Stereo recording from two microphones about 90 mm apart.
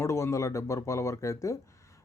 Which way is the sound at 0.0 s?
35° left (ahead or behind).